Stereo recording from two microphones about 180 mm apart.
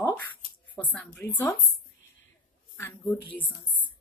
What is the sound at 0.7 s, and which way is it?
Speech, 5° left (ahead or behind).